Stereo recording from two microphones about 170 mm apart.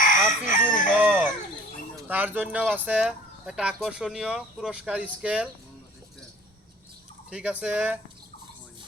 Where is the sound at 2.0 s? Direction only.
10° right (ahead or behind).